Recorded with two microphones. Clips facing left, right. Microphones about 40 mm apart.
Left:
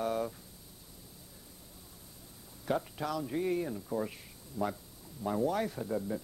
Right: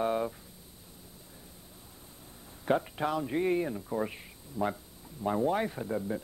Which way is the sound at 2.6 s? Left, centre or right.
Right.